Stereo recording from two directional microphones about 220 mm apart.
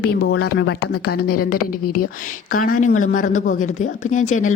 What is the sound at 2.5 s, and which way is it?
Speech, 40° left (ahead or behind).